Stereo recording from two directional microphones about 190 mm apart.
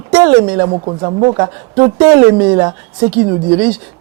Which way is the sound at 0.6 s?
25° right (ahead or behind).